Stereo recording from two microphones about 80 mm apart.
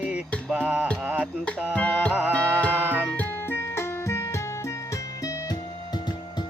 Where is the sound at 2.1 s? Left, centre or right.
Centre.